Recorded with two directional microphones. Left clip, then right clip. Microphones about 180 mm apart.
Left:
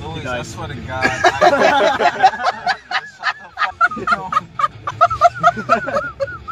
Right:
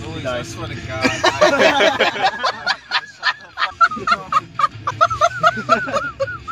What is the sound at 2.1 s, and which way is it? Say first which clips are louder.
Fowl: left 4 dB; 45° right (ahead or behind).